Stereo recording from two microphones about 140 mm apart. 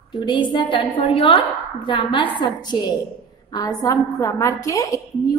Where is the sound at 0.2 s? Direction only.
35° left (ahead or behind).